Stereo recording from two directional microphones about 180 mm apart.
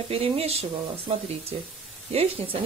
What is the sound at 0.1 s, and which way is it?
Speech, 35° right (ahead or behind).